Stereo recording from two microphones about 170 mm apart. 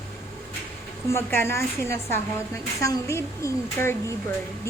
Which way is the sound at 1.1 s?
15° left (ahead or behind).